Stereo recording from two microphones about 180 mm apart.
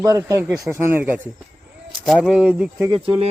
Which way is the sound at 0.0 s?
15° right (ahead or behind).